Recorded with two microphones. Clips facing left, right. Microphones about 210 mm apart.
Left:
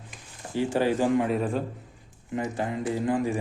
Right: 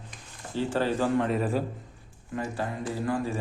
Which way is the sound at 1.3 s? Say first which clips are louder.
Left 1 dB; 5° right (ahead or behind).